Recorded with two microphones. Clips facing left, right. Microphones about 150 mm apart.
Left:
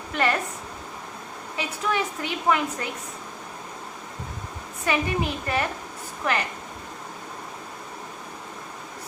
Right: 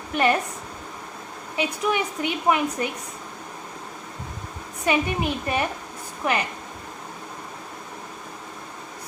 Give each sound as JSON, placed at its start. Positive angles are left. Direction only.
{"t": 0.1, "sound": "a woman's voice", "side_deg": -20}
{"t": 1.5, "sound": "a woman's voice", "side_deg": -20}
{"t": 4.9, "sound": "a woman's voice", "side_deg": -20}